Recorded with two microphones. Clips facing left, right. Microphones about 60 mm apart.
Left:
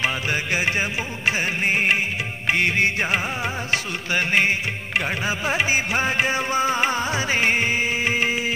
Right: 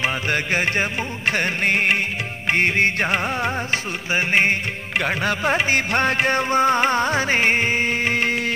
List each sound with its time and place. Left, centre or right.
1.3 s music: right
3.0 s music: centre
3.7 s music: right
5.0 s music: right
5.9 s music: centre
6.5 s music: right
7.9 s music: centre